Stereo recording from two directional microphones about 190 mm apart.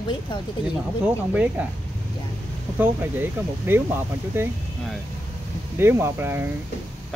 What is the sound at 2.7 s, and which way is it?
Speech, 10° right (ahead or behind).